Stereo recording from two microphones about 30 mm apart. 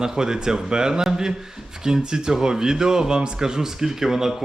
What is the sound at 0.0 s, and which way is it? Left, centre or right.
Speech, right.